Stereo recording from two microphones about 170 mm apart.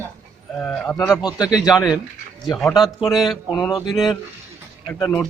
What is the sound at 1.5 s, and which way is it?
Speech, 5° right (ahead or behind).